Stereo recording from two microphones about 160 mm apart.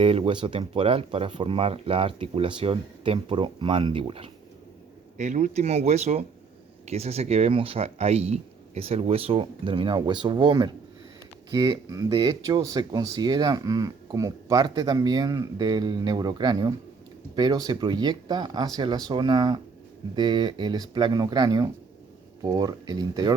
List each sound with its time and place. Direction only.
0.0 s speech: 35° right (ahead or behind)
5.1 s speech: 50° right (ahead or behind); by 23.3 s 25° right (ahead or behind)